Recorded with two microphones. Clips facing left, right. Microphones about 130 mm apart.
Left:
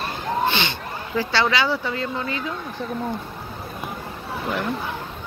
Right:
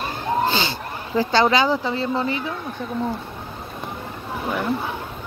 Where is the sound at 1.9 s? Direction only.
25° right (ahead or behind).